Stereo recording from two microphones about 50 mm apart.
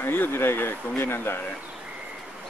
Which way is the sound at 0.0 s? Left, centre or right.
Left.